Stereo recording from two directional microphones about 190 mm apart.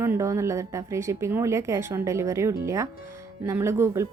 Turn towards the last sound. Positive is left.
turn(degrees=-15)  # may be behind; listen again after turning